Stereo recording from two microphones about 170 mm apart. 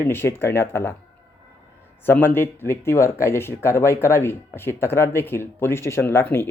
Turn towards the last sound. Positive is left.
turn(degrees=15)  # may be behind; listen again after turning